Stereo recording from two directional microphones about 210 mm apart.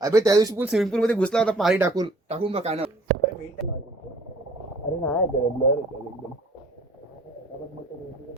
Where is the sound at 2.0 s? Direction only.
25° right (ahead or behind).